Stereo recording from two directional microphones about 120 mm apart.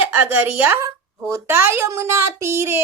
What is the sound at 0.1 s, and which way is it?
A woman's voice, 15° right (ahead or behind).